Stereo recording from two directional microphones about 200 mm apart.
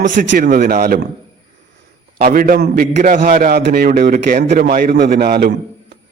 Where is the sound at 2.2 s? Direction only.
45° right (ahead or behind).